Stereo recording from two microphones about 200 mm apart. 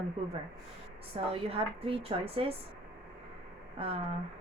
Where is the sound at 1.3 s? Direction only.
30° right (ahead or behind).